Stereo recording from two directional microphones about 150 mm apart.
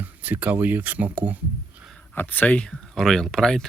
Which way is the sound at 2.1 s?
10° left (ahead or behind).